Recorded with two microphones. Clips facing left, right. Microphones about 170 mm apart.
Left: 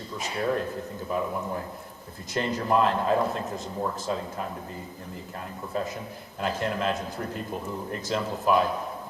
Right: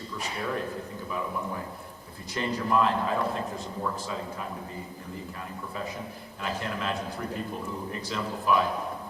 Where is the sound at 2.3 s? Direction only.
40° left (ahead or behind).